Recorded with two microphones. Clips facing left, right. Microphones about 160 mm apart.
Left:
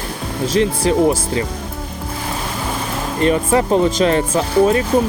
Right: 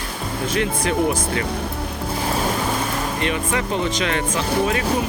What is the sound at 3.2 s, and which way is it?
Speech, 40° left (ahead or behind).